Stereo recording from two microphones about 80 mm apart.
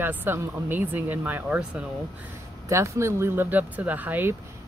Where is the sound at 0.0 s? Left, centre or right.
Right.